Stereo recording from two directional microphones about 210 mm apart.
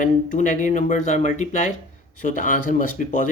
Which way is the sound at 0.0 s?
40° left (ahead or behind).